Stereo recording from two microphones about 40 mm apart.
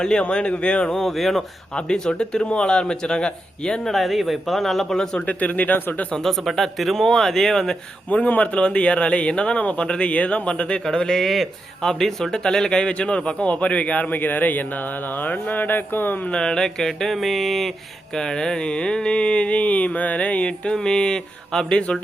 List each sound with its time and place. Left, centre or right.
0.0 s a man's voice: left
0.9 s speech: centre
1.7 s a man's voice: left
3.8 s speech: centre
5.2 s speech: left
6.1 s speech: centre
8.1 s a man's voice: left
10.8 s a man's voice: centre; by 16.1 s left
16.3 s speech: centre
18.1 s a man's voice: centre
20.7 s a man's voice: centre